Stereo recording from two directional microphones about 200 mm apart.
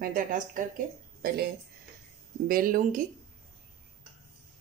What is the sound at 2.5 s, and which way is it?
Speech, 45° right (ahead or behind).